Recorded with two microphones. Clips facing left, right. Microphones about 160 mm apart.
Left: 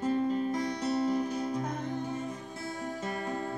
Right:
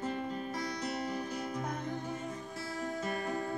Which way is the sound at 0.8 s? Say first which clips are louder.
Left 8 dB; 30° left (ahead or behind).